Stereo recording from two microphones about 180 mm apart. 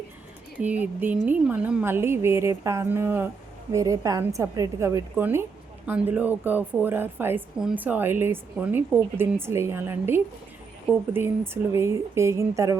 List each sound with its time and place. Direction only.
0.6 s a woman's voice: 10° right (ahead or behind)